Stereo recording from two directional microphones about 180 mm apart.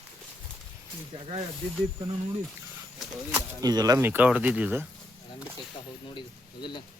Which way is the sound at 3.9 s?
10° right (ahead or behind).